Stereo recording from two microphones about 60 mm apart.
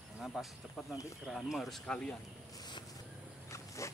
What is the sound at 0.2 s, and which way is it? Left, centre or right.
Speech, centre.